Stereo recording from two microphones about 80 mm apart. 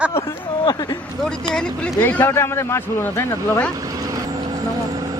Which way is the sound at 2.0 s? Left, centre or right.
Left.